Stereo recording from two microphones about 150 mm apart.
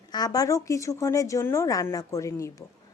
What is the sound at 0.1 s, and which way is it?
A woman's voice, 25° left (ahead or behind).